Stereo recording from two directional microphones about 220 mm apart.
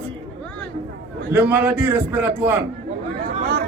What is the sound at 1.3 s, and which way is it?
A man's voice, 10° right (ahead or behind).